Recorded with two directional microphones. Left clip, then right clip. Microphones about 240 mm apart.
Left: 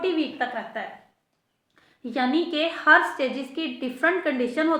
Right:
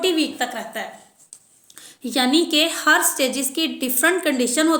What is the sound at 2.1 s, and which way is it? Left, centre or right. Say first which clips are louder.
A woman's voice: right 6 dB; right.